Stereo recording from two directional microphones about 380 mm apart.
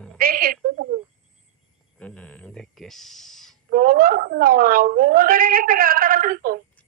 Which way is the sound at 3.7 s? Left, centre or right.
Right.